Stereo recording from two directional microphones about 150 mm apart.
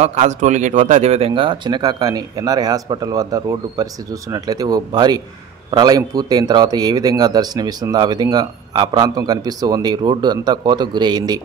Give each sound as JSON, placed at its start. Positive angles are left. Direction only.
{"t": 0.0, "sound": "a man's voice", "side_deg": -50}